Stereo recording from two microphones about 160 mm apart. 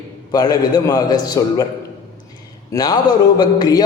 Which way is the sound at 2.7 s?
25° left (ahead or behind).